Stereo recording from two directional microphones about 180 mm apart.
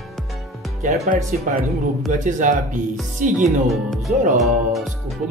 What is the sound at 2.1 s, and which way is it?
Speech, 45° right (ahead or behind).